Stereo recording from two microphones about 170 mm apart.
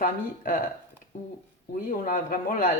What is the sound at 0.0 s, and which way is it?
Speech, 50° left (ahead or behind).